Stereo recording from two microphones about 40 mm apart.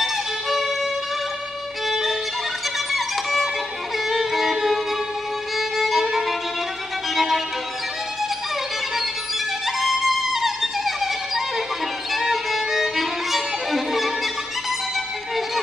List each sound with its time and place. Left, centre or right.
0.0 s music: centre
1.9 s violin: centre
2.9 s music: centre
5.6 s violin: centre
9.7 s music: centre
12.1 s violin: centre